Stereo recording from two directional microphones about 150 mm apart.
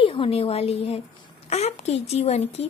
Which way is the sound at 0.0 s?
40° left (ahead or behind).